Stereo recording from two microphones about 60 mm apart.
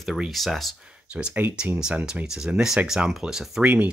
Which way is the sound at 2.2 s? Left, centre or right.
Centre.